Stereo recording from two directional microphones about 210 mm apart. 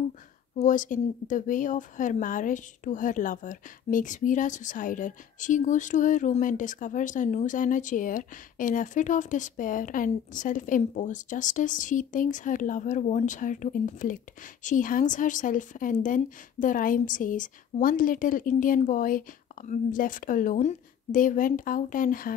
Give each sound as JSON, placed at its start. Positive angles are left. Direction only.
{"t": 0.6, "sound": "speech", "side_deg": 40}